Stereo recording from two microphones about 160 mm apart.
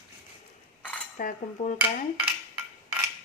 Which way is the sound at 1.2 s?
55° left (ahead or behind).